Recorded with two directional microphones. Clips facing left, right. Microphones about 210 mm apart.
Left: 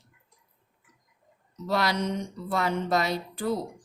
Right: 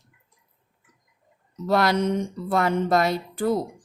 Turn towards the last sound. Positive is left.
turn(degrees=-50)  # may be behind; listen again after turning